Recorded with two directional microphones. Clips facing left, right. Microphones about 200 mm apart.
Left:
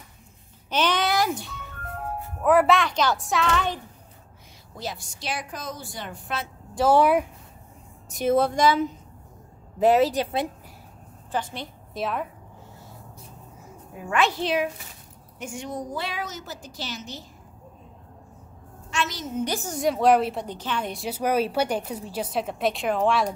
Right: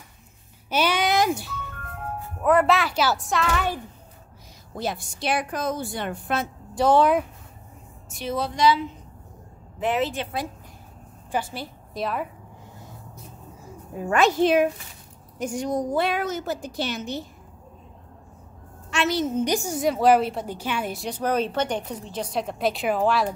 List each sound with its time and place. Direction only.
0.7 s a sound: 10° right (ahead or behind)
1.3 s speech: 5° right (ahead or behind)
4.7 s a woman's voice: 55° right (ahead or behind)
6.7 s speech: centre (ahead or behind)
7.0 s speech: 10° left (ahead or behind)
8.1 s a woman's voice: 50° left (ahead or behind)
11.3 s a woman's voice: 5° right (ahead or behind)
14.0 s a woman's voice: 40° right (ahead or behind)
15.3 s a woman's voice: 40° right (ahead or behind); by 17.3 s 60° right (ahead or behind)
18.9 s a sound: 65° right (ahead or behind)
19.4 s a woman's voice: 15° right (ahead or behind)
19.8 s speech: centre (ahead or behind)